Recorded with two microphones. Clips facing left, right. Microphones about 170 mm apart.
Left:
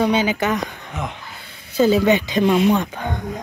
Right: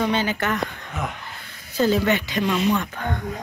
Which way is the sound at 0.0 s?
15° left (ahead or behind).